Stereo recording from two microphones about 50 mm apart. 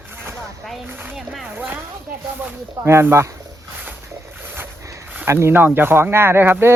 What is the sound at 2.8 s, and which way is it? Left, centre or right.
Speech, right.